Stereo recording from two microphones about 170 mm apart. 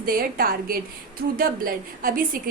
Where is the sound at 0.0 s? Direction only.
60° right (ahead or behind).